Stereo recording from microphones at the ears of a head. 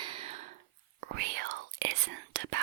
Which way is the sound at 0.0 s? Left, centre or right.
Right.